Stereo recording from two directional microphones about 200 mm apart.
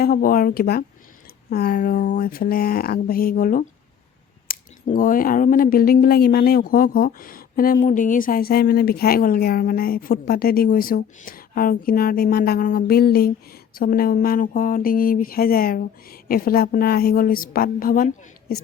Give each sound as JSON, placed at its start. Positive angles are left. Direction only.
{"t": 0.0, "sound": "speech", "side_deg": 45}